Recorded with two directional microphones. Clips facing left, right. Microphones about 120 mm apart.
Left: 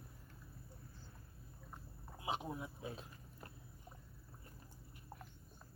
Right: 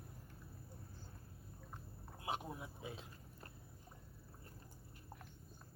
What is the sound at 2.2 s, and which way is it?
Speech, 5° left (ahead or behind).